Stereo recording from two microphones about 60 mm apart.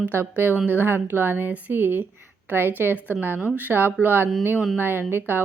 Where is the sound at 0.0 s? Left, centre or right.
Right.